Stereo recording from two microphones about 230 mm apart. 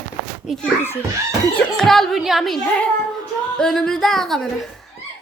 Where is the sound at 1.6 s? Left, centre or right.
Centre.